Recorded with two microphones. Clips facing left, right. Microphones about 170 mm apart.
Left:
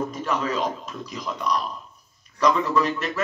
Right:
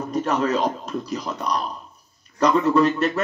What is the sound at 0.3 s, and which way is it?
Speech, 40° right (ahead or behind).